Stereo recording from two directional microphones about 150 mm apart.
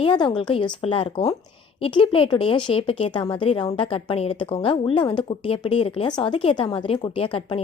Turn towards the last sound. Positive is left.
turn(degrees=35)  # may be behind; listen again after turning